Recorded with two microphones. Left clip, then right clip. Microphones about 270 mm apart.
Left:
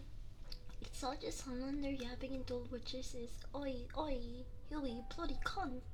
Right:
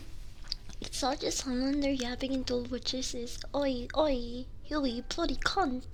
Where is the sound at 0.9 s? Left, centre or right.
Right.